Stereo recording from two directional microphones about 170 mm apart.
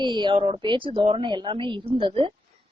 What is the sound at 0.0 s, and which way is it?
A woman's voice, 25° right (ahead or behind).